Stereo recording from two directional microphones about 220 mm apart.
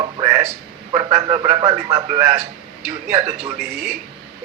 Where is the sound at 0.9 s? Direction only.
20° right (ahead or behind).